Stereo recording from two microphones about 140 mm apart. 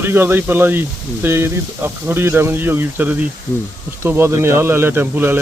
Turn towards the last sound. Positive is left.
turn(degrees=-15)  # may be behind; listen again after turning